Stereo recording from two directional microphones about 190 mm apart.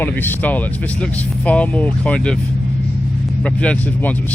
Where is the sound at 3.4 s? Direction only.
5° left (ahead or behind).